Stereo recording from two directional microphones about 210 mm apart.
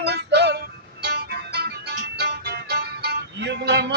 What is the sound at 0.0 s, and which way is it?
Music, 50° right (ahead or behind).